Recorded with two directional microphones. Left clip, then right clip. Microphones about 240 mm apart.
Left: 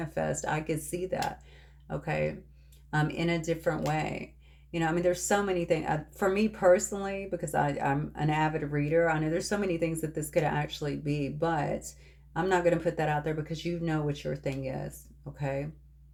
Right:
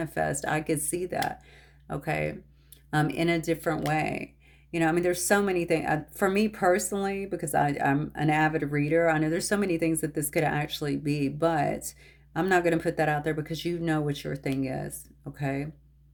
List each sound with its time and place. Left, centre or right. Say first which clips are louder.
0.0 s speech: right 3 dB; right